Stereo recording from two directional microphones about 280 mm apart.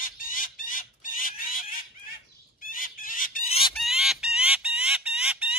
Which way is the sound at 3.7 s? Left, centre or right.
Centre.